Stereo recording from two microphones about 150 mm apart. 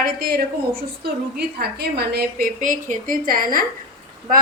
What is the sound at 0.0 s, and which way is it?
Speech, 90° right.